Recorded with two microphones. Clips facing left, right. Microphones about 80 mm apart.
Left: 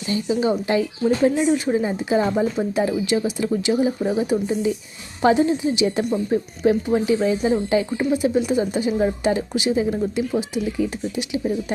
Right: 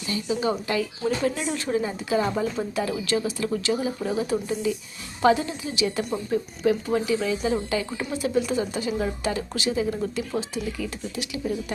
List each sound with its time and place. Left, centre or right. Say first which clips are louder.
0.1 s speech: left 5 dB; left
1.8 s speech: left 4 dB; left